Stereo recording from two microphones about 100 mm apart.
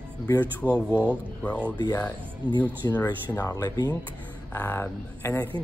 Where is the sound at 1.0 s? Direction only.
15° left (ahead or behind).